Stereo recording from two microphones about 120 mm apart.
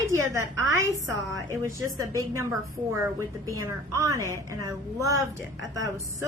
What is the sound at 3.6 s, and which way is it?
A woman's voice, 25° right (ahead or behind).